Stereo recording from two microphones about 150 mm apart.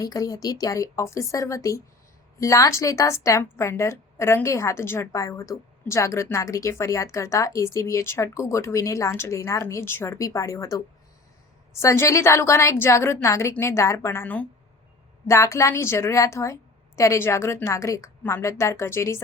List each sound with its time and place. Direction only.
0.0 s a woman's voice: 25° left (ahead or behind)